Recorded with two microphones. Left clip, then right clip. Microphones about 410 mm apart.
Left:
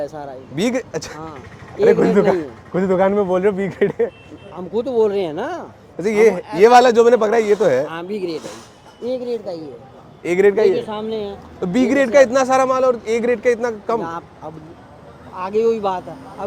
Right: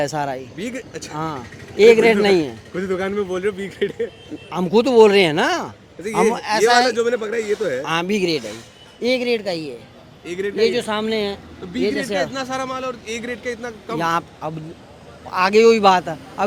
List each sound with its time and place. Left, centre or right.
0.0 s speech: right
0.5 s speech: left
1.8 s speech: right
2.7 s speech: left
4.5 s speech: right
6.0 s speech: left
7.9 s speech: right
10.2 s speech: left
10.6 s speech: right
11.6 s speech: left
14.0 s speech: right